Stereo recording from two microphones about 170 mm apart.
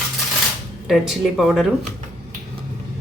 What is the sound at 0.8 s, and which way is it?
Speech, centre (ahead or behind).